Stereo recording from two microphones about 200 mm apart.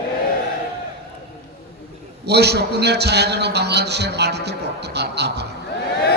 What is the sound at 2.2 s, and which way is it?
A man's voice, 55° right (ahead or behind).